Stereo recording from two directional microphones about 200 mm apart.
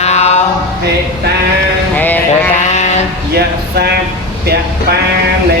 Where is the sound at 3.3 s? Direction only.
55° right (ahead or behind).